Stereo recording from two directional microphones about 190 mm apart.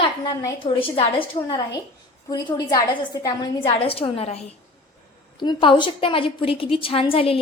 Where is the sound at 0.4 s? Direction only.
25° left (ahead or behind).